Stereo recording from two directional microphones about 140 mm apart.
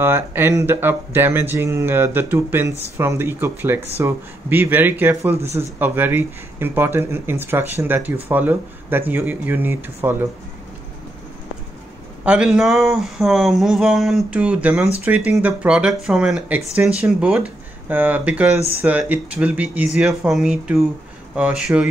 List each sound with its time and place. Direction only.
0.0 s speech: 15° right (ahead or behind)
12.3 s speech: 5° right (ahead or behind)